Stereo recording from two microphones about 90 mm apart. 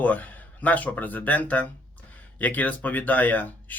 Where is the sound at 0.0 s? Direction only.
20° left (ahead or behind).